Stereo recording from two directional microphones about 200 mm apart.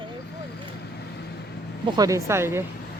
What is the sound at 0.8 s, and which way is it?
Vehicle, 55° left (ahead or behind).